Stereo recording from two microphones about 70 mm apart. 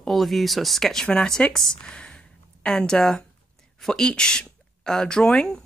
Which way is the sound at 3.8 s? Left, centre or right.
Centre.